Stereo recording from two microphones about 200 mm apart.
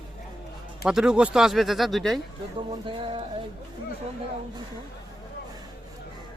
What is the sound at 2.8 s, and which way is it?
Music, 25° right (ahead or behind).